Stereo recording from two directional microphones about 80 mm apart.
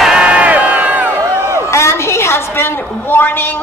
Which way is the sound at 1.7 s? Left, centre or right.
Left.